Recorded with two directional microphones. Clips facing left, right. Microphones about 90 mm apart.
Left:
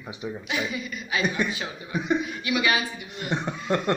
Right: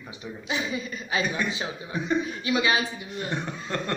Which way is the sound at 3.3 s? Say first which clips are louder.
Left 7 dB; 20° left (ahead or behind).